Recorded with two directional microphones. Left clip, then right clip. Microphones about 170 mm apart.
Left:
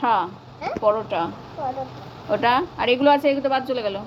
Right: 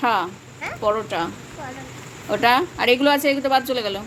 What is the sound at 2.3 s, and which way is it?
A woman's voice, 30° right (ahead or behind).